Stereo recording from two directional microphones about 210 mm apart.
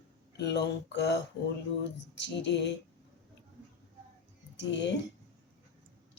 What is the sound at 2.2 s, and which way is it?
Speech, 55° left (ahead or behind).